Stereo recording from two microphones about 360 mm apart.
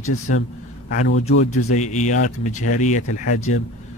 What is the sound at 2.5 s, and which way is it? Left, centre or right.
Speech, left.